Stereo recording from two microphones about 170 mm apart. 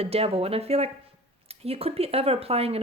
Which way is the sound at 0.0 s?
35° right (ahead or behind).